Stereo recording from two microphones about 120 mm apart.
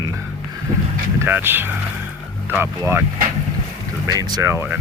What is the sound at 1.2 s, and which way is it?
Speech, 15° right (ahead or behind).